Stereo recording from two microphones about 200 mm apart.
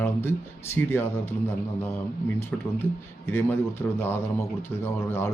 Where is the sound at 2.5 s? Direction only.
5° left (ahead or behind).